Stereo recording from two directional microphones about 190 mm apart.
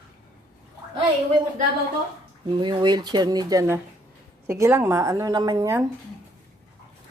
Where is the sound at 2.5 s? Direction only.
25° right (ahead or behind).